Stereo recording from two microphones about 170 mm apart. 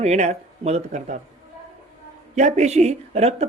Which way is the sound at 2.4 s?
45° right (ahead or behind).